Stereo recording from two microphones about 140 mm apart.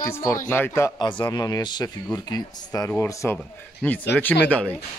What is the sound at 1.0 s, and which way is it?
Speech, 35° left (ahead or behind).